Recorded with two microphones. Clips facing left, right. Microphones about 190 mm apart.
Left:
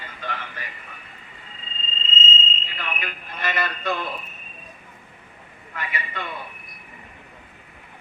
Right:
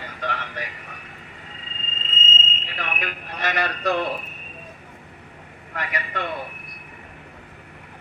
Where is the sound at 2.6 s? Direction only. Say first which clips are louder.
Right 2 dB; 70° right (ahead or behind).